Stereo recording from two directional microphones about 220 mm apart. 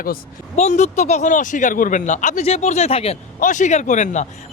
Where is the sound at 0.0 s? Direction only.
35° left (ahead or behind).